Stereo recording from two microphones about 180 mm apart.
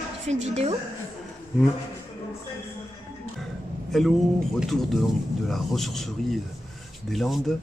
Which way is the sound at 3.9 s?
Centre (ahead or behind).